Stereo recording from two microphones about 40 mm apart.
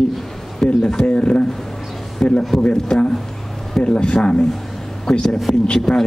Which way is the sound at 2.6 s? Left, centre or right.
Centre.